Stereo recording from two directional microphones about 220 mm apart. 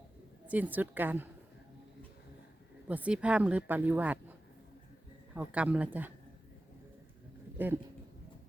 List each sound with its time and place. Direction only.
0.4 s speech: 5° right (ahead or behind)
2.8 s speech: 5° right (ahead or behind)